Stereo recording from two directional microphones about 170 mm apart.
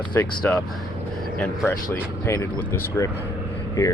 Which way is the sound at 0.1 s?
10° left (ahead or behind).